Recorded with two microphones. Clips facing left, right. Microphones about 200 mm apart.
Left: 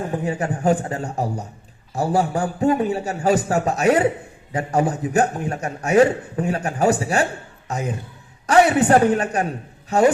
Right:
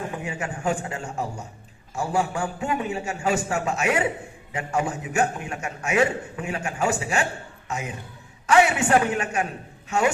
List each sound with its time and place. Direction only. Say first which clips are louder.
0.1 s a man's voice: left 7 dB; 35° left (ahead or behind)